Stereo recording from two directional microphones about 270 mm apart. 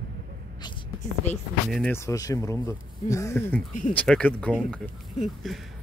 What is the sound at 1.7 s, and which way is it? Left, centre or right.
Speech, centre.